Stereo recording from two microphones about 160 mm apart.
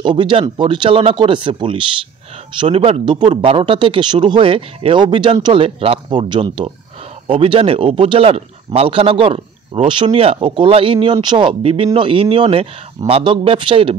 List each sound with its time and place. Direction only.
0.0 s speech: 30° right (ahead or behind)